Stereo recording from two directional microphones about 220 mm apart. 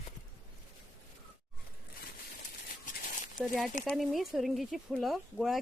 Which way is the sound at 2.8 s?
35° left (ahead or behind).